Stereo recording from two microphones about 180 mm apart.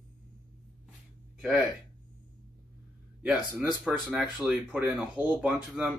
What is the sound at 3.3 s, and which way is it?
Speech, centre (ahead or behind).